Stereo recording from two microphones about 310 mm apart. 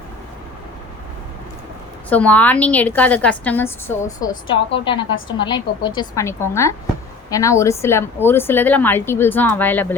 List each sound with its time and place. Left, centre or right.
2.0 s a woman's voice: centre